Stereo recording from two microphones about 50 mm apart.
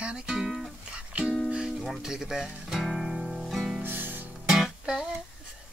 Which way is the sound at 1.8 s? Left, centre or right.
Centre.